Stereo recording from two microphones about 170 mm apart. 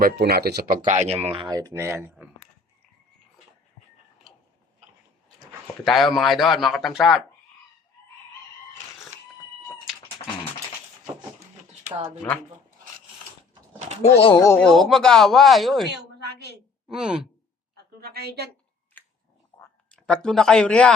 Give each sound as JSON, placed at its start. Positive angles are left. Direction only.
{"t": 0.0, "sound": "speech", "side_deg": -65}
{"t": 5.8, "sound": "speech", "side_deg": 0}
{"t": 11.8, "sound": "speech", "side_deg": -40}
{"t": 13.7, "sound": "pigeon", "side_deg": -40}
{"t": 14.0, "sound": "speech", "side_deg": 35}
{"t": 14.3, "sound": "speech", "side_deg": 20}
{"t": 14.6, "sound": "speech", "side_deg": 0}
{"t": 15.9, "sound": "a sound", "side_deg": -80}
{"t": 16.9, "sound": "speech", "side_deg": -5}
{"t": 18.0, "sound": "a woman's voice", "side_deg": -65}
{"t": 19.0, "sound": "a sound", "side_deg": 10}